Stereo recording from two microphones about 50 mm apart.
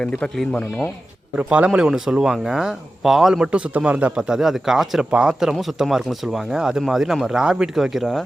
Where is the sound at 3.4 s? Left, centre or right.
Right.